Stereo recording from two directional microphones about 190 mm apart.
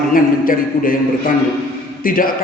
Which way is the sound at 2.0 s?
50° left (ahead or behind).